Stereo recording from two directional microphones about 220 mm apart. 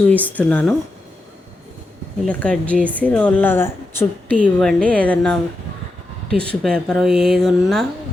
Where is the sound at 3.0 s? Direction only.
5° left (ahead or behind).